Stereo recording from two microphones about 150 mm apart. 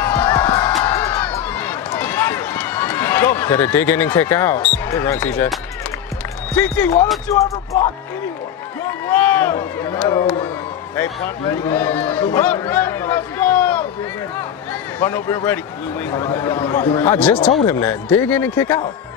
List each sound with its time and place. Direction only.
0.0 s music: 15° left (ahead or behind)
0.8 s run: 15° left (ahead or behind)
6.5 s speech: 10° left (ahead or behind)
7.2 s music: 20° left (ahead or behind)
9.1 s speech: 15° left (ahead or behind)
11.6 s speech: 10° left (ahead or behind)
14.7 s a sound: 10° left (ahead or behind)
16.3 s speech: 15° left (ahead or behind)
17.6 s music: 20° left (ahead or behind)
18.0 s speech: 10° left (ahead or behind)